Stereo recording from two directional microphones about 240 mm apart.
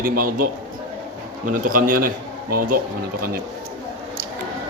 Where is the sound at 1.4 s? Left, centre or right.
Right.